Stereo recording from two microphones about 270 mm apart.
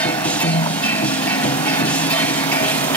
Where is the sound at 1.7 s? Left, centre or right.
Centre.